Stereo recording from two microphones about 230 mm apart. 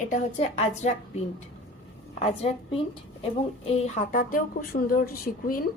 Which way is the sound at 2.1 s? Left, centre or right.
Left.